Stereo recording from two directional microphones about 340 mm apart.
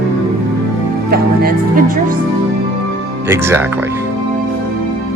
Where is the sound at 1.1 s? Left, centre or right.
Right.